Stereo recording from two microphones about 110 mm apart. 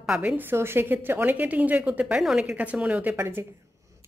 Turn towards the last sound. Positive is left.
turn(degrees=-20)  # may be behind; listen again after turning